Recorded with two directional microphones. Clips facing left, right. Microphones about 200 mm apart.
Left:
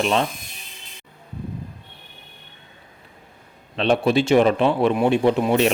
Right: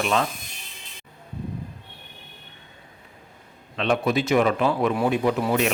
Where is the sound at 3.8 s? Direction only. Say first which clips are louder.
Left 4 dB; 30° left (ahead or behind).